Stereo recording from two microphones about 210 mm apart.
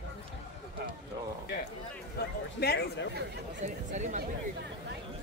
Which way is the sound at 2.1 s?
50° left (ahead or behind).